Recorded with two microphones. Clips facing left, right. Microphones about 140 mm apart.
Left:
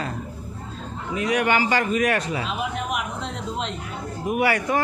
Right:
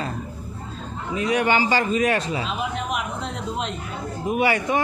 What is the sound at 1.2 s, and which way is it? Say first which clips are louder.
A man's voice: right 1 dB; 25° right (ahead or behind).